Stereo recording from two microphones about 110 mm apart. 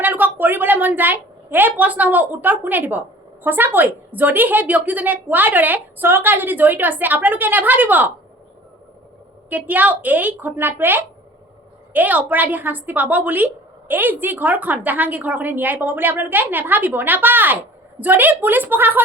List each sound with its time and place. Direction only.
0.0 s a woman's voice: 15° right (ahead or behind)
9.5 s a woman's voice: 15° right (ahead or behind)